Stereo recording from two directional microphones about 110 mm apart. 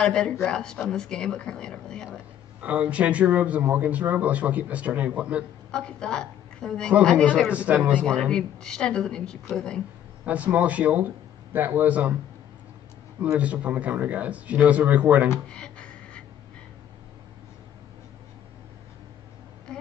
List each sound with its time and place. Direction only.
0.0 s speech: 5° left (ahead or behind)
2.6 s speech: 10° right (ahead or behind)
5.7 s a woman's voice: 5° left (ahead or behind)
7.5 s speech: 15° right (ahead or behind)
8.2 s speech: 5° left (ahead or behind)
10.2 s speech: 15° right (ahead or behind)
13.2 s speech: 10° right (ahead or behind)
15.4 s a sound: 5° left (ahead or behind)